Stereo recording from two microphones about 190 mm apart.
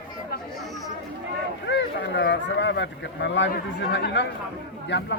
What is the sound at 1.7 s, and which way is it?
Speech, 65° left (ahead or behind).